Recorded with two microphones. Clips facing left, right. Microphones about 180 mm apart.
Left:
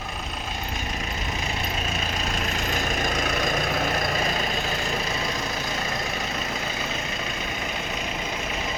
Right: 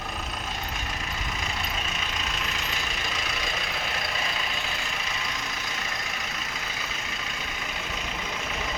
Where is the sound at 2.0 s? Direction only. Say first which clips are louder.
Left 5 dB; 45° left (ahead or behind).